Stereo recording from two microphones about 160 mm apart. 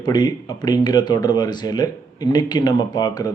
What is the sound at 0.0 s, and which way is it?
Speech, 25° left (ahead or behind).